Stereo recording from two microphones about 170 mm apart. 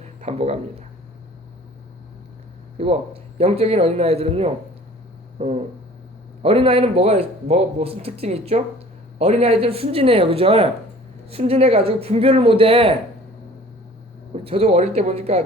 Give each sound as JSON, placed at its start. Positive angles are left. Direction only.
{"t": 0.2, "sound": "a sound", "side_deg": -40}
{"t": 2.7, "sound": "speech", "side_deg": -40}
{"t": 14.4, "sound": "speech", "side_deg": -35}